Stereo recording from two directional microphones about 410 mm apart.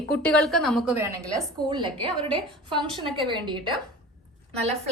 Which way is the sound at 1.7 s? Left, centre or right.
Centre.